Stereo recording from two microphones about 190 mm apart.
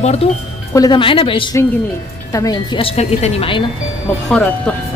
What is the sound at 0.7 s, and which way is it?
A woman's voice, 20° left (ahead or behind).